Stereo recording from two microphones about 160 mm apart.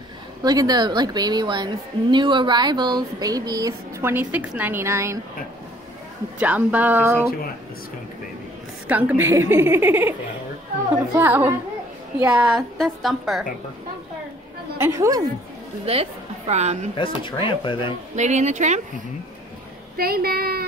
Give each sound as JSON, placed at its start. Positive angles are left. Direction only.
{"t": 0.4, "sound": "a woman's voice", "side_deg": -25}
{"t": 6.4, "sound": "a woman's voice", "side_deg": -10}
{"t": 8.8, "sound": "a woman's voice", "side_deg": -10}
{"t": 11.1, "sound": "a woman's voice", "side_deg": -10}
{"t": 14.8, "sound": "a woman's voice", "side_deg": -20}
{"t": 15.8, "sound": "a woman's voice", "side_deg": -40}
{"t": 16.9, "sound": "speech", "side_deg": 30}
{"t": 18.1, "sound": "a woman's voice", "side_deg": -45}
{"t": 20.0, "sound": "speech", "side_deg": -70}